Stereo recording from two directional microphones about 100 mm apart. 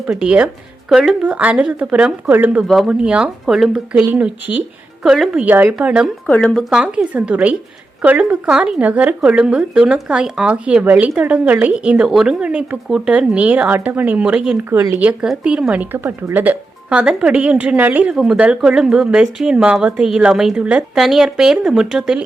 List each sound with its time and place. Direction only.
0.1 s speech: 10° right (ahead or behind)
2.6 s speech: 5° right (ahead or behind)
4.1 s speech: 15° right (ahead or behind)
6.4 s speech: 5° left (ahead or behind)
6.7 s speech: 10° right (ahead or behind)
14.6 s speech: 25° right (ahead or behind)
14.9 s speech: 15° right (ahead or behind)